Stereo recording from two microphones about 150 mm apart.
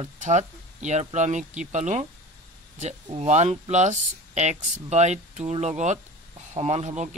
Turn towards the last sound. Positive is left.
turn(degrees=-50)  # may be behind; listen again after turning